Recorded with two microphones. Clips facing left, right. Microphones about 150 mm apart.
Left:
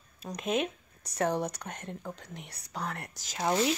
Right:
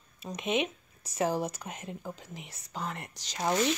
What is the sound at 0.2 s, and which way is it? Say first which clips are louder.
Speech: even; centre (ahead or behind).